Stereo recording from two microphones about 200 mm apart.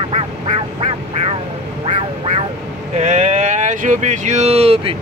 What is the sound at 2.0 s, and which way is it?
Quack, 30° right (ahead or behind).